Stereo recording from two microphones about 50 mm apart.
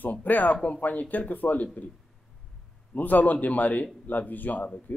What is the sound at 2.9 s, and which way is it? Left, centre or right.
Speech, left.